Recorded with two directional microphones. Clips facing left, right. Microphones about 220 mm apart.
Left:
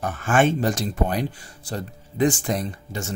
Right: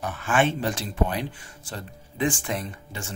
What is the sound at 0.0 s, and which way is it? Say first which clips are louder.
Speech: left 3 dB; 45° left (ahead or behind).